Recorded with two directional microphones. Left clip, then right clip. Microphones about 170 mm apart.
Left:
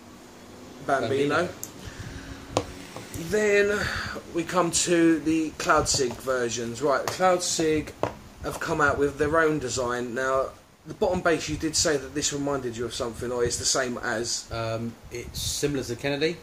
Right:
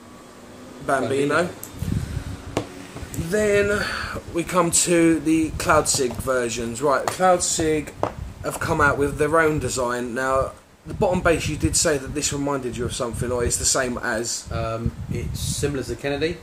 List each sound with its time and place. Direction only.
0.8 s speech: 30° right (ahead or behind)
3.3 s speech: 25° right (ahead or behind)
8.5 s speech: 30° right (ahead or behind)
14.5 s speech: 25° left (ahead or behind)